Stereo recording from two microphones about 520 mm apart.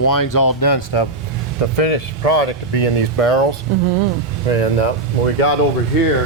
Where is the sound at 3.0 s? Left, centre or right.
Left.